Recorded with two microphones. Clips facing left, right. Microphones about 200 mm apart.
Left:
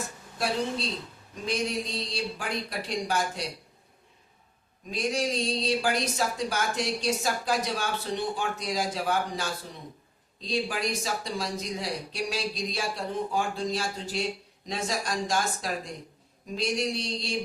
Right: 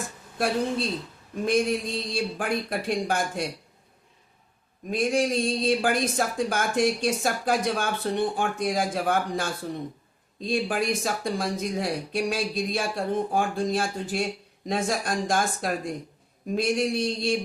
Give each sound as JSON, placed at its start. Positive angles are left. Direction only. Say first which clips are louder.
{"t": 0.3, "sound": "speech", "louder": "right 4 dB", "side_deg": -55}
{"t": 4.9, "sound": "speech", "louder": "right 5 dB", "side_deg": -55}